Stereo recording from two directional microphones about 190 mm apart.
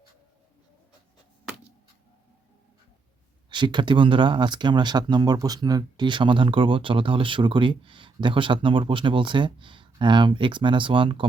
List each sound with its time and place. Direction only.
3.5 s speech: 25° right (ahead or behind)